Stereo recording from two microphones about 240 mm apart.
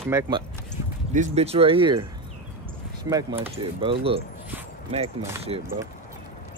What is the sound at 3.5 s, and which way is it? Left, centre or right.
Speech, right.